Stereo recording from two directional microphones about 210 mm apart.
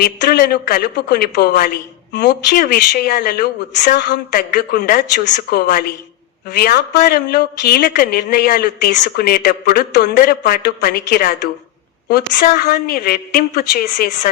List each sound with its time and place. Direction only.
0.0 s a woman's voice: 45° left (ahead or behind)